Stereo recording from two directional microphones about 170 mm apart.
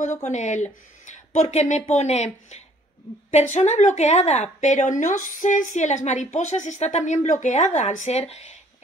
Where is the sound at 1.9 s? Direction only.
40° left (ahead or behind).